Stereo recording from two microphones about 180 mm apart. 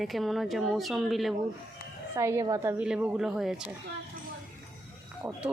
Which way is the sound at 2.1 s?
15° right (ahead or behind).